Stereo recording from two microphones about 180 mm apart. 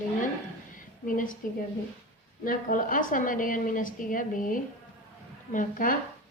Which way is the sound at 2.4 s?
50° left (ahead or behind).